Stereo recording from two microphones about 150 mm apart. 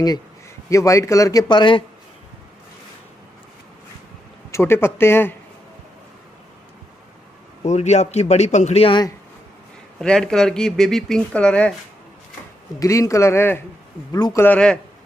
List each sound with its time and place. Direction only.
0.7 s a man's voice: 20° left (ahead or behind)
4.5 s speech: 15° left (ahead or behind)
7.6 s a man's voice: 50° left (ahead or behind)
9.9 s speech: 5° left (ahead or behind)
12.7 s a man's voice: 20° left (ahead or behind)
14.4 s speech: 10° left (ahead or behind)